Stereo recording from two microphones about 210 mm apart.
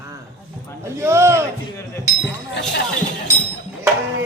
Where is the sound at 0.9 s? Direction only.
10° right (ahead or behind).